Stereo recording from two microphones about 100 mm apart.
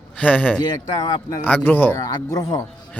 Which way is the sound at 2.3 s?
35° left (ahead or behind).